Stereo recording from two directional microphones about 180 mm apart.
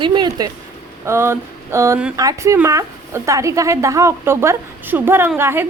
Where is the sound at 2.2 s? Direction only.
20° right (ahead or behind).